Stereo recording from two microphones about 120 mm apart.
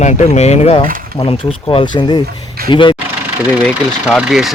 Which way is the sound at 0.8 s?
50° left (ahead or behind).